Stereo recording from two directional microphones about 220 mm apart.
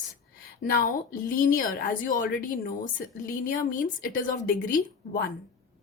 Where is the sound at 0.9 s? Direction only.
35° left (ahead or behind).